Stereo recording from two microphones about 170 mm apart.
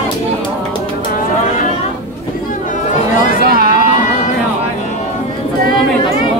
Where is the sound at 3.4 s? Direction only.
65° right (ahead or behind).